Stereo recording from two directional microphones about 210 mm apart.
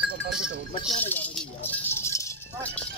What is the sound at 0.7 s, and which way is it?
Speech, 30° left (ahead or behind).